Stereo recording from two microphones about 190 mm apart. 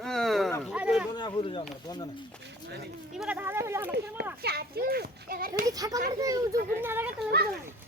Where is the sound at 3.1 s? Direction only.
5° right (ahead or behind).